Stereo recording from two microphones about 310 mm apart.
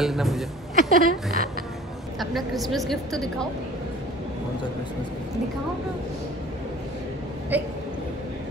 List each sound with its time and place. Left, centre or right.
0.0 s a woman's voice: centre
0.7 s speech: right
2.1 s a woman's voice: centre
7.5 s a woman's voice: centre